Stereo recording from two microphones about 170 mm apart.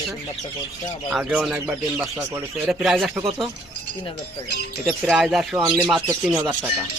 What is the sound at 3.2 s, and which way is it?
Speech, 30° right (ahead or behind).